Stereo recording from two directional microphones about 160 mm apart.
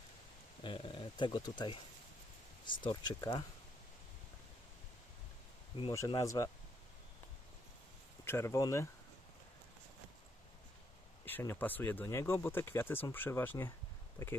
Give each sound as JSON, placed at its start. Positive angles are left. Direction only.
{"t": 0.6, "sound": "a sound", "side_deg": 30}
{"t": 2.6, "sound": "speech", "side_deg": 30}
{"t": 5.7, "sound": "speech", "side_deg": 30}
{"t": 8.2, "sound": "speech", "side_deg": 15}
{"t": 11.3, "sound": "speech", "side_deg": 10}